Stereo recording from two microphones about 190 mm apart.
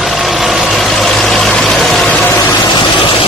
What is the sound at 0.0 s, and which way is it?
Vehicle, centre (ahead or behind).